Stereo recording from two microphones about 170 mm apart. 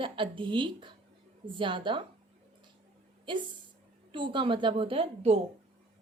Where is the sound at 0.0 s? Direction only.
30° right (ahead or behind).